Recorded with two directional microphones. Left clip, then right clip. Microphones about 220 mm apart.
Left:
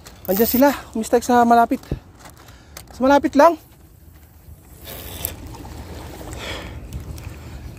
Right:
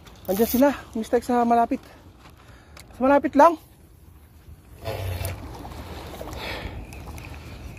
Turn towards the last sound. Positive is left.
turn(degrees=5)  # may be behind; listen again after turning